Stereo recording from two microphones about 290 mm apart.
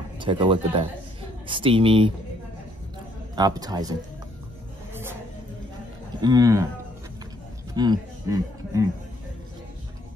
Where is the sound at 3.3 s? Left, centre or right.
Centre.